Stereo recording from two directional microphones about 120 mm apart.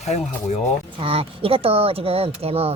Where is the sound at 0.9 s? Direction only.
50° right (ahead or behind).